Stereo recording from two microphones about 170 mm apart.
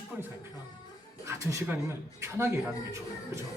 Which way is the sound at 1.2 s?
15° right (ahead or behind).